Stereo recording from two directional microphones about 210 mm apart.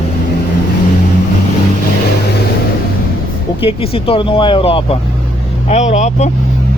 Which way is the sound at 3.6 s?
25° left (ahead or behind).